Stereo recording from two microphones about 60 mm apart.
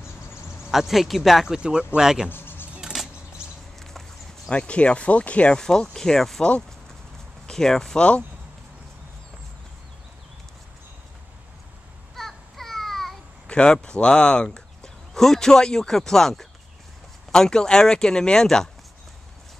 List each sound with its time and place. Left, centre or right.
0.7 s speech: centre
2.3 s music: left
2.8 s a sound: centre
4.5 s speech: centre
5.6 s speech: centre
7.4 s speech: centre
12.2 s a sound: centre
13.5 s speech: centre